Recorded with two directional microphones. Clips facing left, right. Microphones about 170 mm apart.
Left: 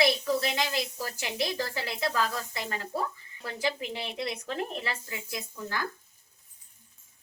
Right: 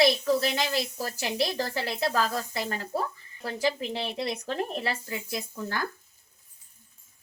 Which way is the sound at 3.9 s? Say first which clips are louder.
Right 3 dB; 40° right (ahead or behind).